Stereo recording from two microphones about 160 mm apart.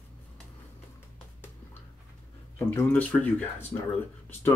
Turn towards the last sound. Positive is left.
turn(degrees=15)  # may be behind; listen again after turning